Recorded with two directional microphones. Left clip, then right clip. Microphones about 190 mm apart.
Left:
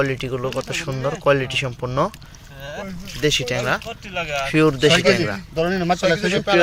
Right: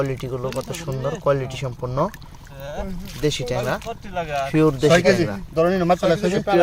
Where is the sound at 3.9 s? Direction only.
15° right (ahead or behind).